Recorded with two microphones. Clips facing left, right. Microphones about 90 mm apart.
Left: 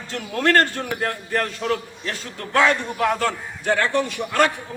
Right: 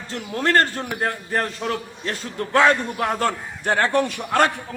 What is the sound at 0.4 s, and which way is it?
A man's voice, 25° right (ahead or behind).